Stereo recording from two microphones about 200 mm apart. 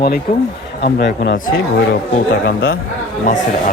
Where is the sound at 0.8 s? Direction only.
60° left (ahead or behind).